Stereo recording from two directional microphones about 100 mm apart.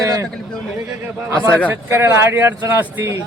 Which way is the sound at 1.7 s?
25° right (ahead or behind).